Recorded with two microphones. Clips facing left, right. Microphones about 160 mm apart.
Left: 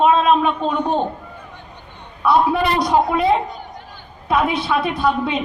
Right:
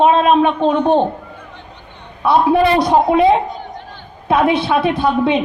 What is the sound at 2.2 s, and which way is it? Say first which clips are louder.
A man's voice: right 4 dB; 25° right (ahead or behind).